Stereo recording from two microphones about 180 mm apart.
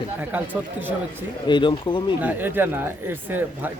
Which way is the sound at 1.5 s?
25° left (ahead or behind).